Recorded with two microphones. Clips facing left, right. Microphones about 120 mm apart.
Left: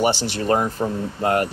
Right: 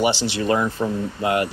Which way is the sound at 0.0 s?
45° left (ahead or behind).